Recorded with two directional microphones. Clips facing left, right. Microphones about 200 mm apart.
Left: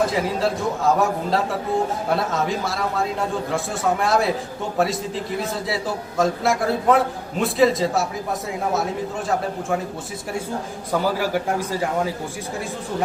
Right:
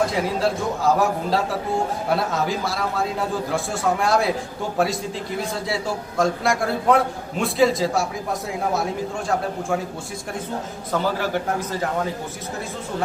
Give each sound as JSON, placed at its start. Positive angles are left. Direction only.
{"t": 0.1, "sound": "a man's voice", "side_deg": 0}
{"t": 10.9, "sound": "a man's voice", "side_deg": 10}